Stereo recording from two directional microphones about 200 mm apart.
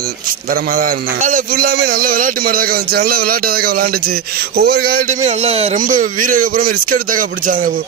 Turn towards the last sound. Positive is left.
turn(degrees=-45)  # may be behind; listen again after turning